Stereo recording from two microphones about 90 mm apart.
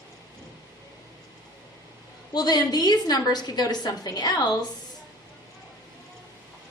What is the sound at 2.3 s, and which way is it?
A woman's voice, 50° left (ahead or behind).